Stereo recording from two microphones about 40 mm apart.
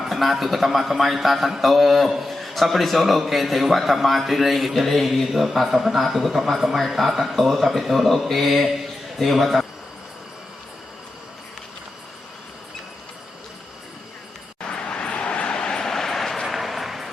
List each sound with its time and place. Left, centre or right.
0.0 s a man's voice: centre
14.7 s vehicle: left; by 17.1 s centre